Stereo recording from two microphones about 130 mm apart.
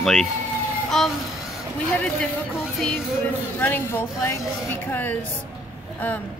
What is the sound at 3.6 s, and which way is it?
Speech, 15° left (ahead or behind).